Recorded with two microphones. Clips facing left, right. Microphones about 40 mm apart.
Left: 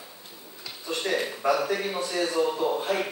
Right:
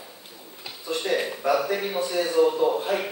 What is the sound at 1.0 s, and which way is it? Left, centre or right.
A man's voice, centre.